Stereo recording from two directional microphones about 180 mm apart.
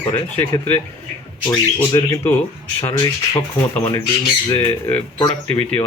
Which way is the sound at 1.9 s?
20° left (ahead or behind).